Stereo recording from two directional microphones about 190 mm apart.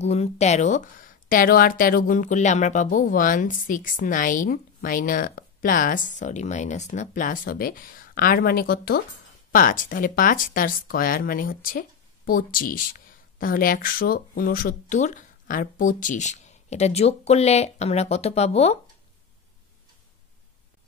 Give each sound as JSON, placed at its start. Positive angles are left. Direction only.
{"t": 0.0, "sound": "a woman's voice", "side_deg": 35}